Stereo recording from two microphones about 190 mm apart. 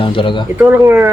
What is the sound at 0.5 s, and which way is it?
Speech, 10° right (ahead or behind).